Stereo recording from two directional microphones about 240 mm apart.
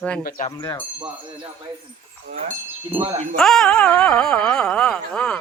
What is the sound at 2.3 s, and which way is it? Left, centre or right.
Speech, right.